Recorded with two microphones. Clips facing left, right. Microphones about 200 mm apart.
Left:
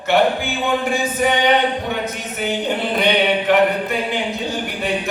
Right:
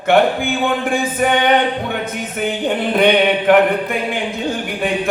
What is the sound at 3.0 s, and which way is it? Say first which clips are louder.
Mantra: right 5 dB; 55° right (ahead or behind).